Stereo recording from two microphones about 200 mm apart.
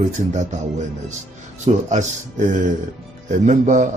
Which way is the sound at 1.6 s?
35° right (ahead or behind).